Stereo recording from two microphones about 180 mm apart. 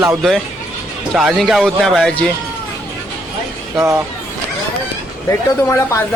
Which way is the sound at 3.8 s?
15° right (ahead or behind).